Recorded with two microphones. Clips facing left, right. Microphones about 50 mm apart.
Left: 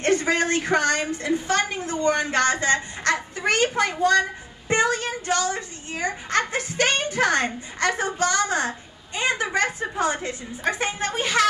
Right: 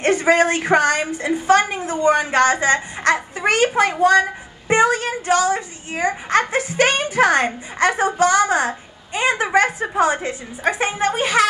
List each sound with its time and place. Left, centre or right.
0.0 s a woman's voice: centre